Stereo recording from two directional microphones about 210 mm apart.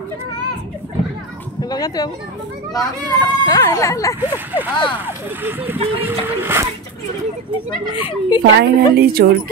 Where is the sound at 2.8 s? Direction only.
15° left (ahead or behind).